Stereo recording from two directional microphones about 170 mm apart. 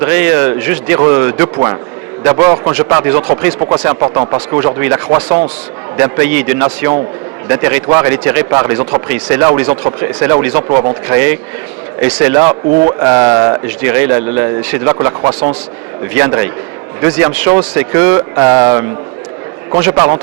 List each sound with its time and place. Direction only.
0.0 s speech: 10° right (ahead or behind)
13.3 s speech: 20° right (ahead or behind)
14.8 s speech: 20° right (ahead or behind)